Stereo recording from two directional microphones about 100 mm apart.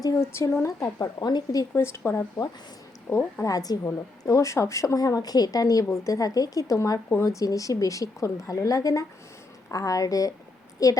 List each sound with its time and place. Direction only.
0.2 s a woman's voice: 25° left (ahead or behind); by 1.6 s 45° left (ahead or behind)
1.7 s speech: 25° left (ahead or behind)
3.4 s a woman's voice: 40° left (ahead or behind)